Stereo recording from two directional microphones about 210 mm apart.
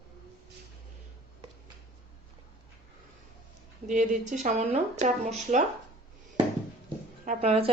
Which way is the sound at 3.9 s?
35° right (ahead or behind).